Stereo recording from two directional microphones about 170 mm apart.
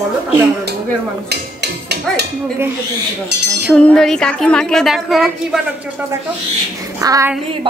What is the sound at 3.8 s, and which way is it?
A woman's voice, 5° left (ahead or behind).